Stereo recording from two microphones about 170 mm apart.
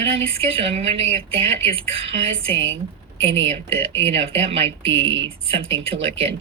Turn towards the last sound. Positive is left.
turn(degrees=-35)  # may be behind; listen again after turning